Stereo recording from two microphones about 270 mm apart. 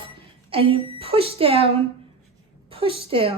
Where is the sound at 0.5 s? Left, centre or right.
Right.